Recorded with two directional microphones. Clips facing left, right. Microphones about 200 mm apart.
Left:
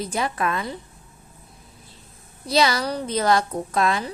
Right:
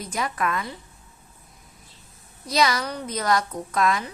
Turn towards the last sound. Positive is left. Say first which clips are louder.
# left 1 dB
turn(degrees=30)  # may be behind; listen again after turning